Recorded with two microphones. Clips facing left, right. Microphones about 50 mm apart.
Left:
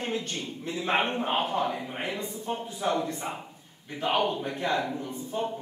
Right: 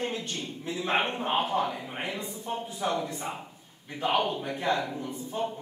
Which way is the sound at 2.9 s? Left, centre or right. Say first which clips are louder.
Left 4 dB; centre.